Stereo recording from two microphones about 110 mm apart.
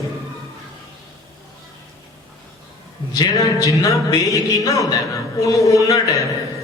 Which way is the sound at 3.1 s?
35° left (ahead or behind).